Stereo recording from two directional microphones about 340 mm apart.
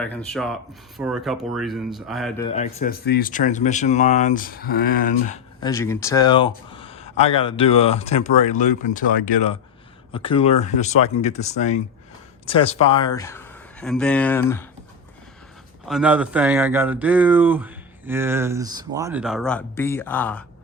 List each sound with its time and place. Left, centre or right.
0.0 s speech: centre
2.4 s speech: centre
15.9 s speech: centre